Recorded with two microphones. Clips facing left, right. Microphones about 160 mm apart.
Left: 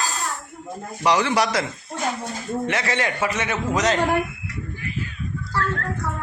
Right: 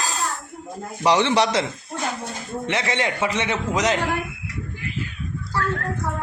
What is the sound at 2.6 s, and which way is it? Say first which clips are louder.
A man's voice: right 2 dB; 20° right (ahead or behind).